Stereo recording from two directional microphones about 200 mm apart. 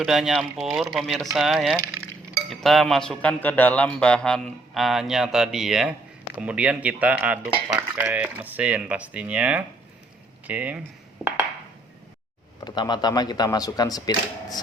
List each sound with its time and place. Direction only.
0.0 s a man's voice: centre (ahead or behind)
11.2 s a sound: 10° right (ahead or behind)
12.5 s speech: 20° left (ahead or behind)